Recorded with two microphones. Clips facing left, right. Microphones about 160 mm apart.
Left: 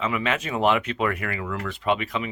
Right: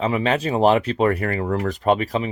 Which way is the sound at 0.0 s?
35° right (ahead or behind).